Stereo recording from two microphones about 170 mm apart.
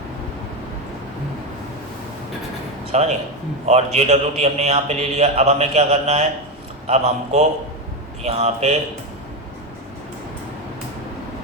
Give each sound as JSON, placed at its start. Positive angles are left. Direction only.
{"t": 2.9, "sound": "a man's voice", "side_deg": -40}